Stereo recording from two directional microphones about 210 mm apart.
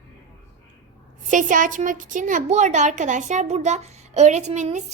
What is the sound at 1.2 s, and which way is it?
A woman's voice, 40° right (ahead or behind).